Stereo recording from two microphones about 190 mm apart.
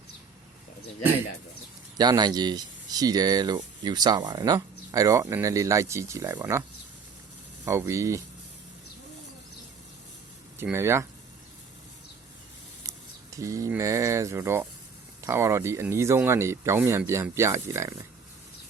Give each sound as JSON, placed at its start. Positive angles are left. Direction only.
{"t": 2.0, "sound": "speech", "side_deg": -20}
{"t": 10.6, "sound": "speech", "side_deg": -15}
{"t": 13.3, "sound": "speech", "side_deg": -15}